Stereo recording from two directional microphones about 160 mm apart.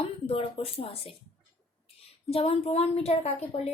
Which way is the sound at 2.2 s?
40° left (ahead or behind).